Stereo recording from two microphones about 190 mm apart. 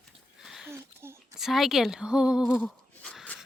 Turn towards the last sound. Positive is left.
turn(degrees=5)  # may be behind; listen again after turning